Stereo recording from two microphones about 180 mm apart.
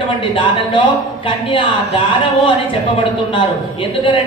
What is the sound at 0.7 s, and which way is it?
Speech, 30° left (ahead or behind).